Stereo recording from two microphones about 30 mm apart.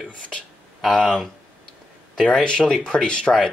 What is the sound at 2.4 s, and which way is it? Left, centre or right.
Speech, left.